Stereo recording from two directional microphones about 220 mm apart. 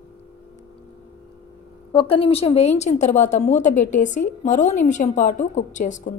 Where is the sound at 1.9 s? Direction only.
25° left (ahead or behind).